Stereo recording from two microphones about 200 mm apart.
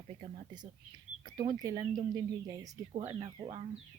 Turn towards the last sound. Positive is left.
turn(degrees=-25)  # may be behind; listen again after turning